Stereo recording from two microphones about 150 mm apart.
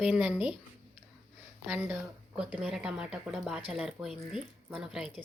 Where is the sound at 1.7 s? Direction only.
10° right (ahead or behind).